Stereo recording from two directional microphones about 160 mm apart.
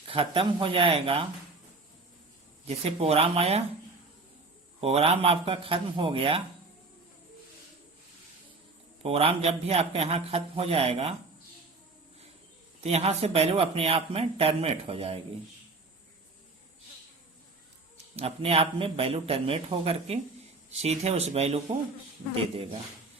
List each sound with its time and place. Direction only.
0.1 s speech: 35° right (ahead or behind)
2.6 s speech: 40° right (ahead or behind)
4.8 s speech: 40° right (ahead or behind)
9.0 s speech: 40° right (ahead or behind)
12.8 s speech: 40° right (ahead or behind)
17.9 s speech: 40° right (ahead or behind)